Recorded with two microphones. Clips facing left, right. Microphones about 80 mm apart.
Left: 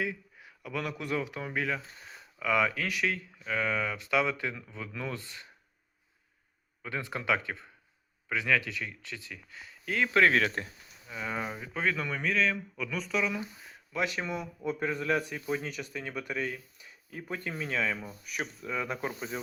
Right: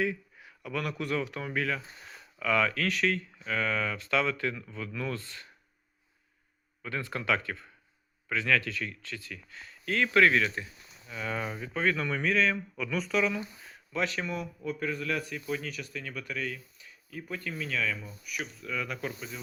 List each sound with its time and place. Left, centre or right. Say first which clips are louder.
0.0 s speech: right 3 dB; centre
6.8 s speech: even; centre
10.1 s a man's voice: right 1 dB; left
10.3 s speech: even; left
11.1 s speech: right 1 dB; centre
13.9 s speech: even; centre
14.6 s a man's voice: left 3 dB; left